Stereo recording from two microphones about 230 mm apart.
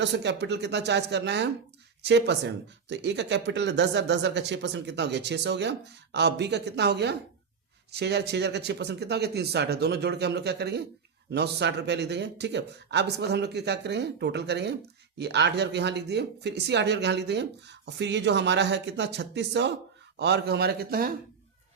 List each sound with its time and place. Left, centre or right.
0.0 s speech: right